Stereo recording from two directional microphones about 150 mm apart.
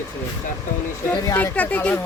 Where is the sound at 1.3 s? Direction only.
15° left (ahead or behind).